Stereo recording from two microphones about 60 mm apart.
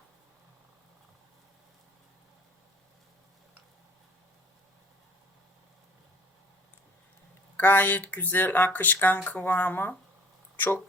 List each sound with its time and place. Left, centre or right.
7.5 s speech: left